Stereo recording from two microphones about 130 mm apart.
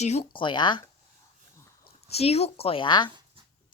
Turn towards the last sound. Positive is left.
turn(degrees=35)  # may be behind; listen again after turning